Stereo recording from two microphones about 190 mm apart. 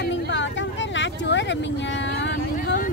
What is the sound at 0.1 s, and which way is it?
Vehicle, 75° left (ahead or behind).